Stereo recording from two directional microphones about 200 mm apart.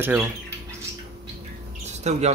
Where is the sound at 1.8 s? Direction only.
35° right (ahead or behind).